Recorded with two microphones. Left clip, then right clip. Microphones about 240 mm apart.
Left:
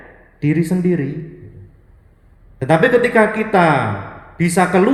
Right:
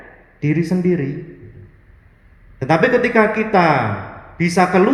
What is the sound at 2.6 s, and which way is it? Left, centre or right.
Speech, left.